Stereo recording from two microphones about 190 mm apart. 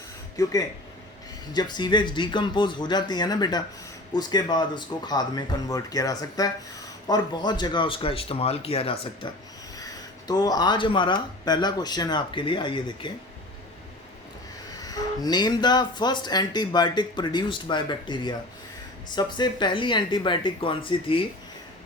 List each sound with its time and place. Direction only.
0.4 s speech: 20° left (ahead or behind)
1.5 s speech: 25° left (ahead or behind)
14.7 s speech: 20° left (ahead or behind)